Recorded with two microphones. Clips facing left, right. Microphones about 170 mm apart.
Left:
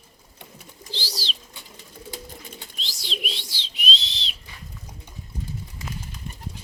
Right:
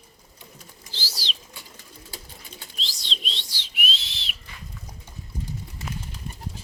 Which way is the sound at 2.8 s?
Centre (ahead or behind).